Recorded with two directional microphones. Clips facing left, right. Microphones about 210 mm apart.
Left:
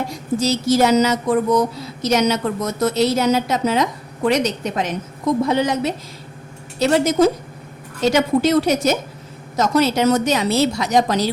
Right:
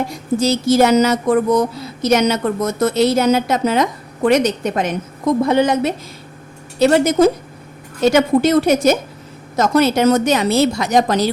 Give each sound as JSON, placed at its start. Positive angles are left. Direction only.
{"t": 0.3, "sound": "a woman's voice", "side_deg": -55}